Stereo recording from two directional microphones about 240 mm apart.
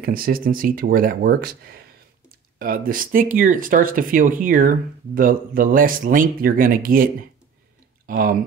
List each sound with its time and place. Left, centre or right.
0.0 s speech: right
2.6 s speech: right
8.1 s speech: right